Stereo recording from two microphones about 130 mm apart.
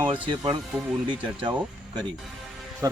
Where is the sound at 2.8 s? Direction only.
25° right (ahead or behind).